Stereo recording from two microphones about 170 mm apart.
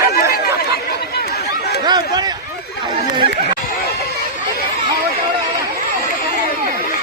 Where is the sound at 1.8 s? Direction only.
25° right (ahead or behind).